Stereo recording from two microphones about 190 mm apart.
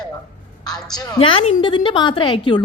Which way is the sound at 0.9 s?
25° left (ahead or behind).